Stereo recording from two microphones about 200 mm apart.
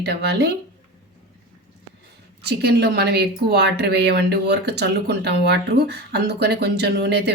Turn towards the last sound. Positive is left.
turn(degrees=-55)  # may be behind; listen again after turning